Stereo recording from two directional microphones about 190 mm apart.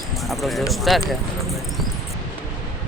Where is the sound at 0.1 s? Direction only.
Centre (ahead or behind).